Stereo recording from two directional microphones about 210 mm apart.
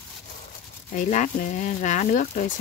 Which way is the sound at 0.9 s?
35° left (ahead or behind).